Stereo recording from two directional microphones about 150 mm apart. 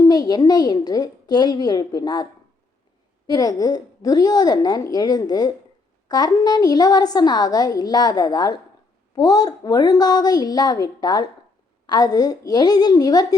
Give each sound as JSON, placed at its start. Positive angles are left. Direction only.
{"t": 0.0, "sound": "a woman's voice", "side_deg": 25}
{"t": 3.2, "sound": "a woman's voice", "side_deg": 25}